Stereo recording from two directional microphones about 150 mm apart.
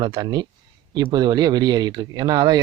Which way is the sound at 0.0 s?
30° right (ahead or behind).